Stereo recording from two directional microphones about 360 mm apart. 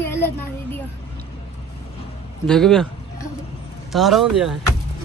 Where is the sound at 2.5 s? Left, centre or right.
Centre.